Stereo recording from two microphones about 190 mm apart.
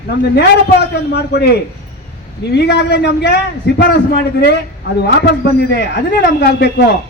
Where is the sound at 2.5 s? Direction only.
65° left (ahead or behind).